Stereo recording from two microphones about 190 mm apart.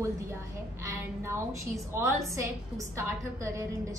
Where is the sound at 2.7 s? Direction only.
15° right (ahead or behind).